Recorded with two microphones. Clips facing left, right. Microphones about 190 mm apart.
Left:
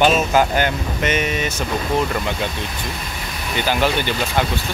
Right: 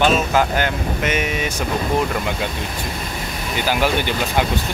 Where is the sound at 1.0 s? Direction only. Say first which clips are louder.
Left 2 dB; 10° right (ahead or behind).